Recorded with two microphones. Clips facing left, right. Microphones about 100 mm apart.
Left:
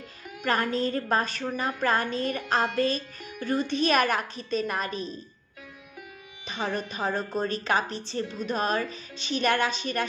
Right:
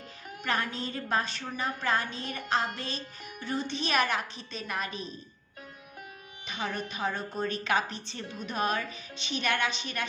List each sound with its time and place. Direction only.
0.4 s a woman's voice: 45° left (ahead or behind)
6.4 s speech: 35° left (ahead or behind)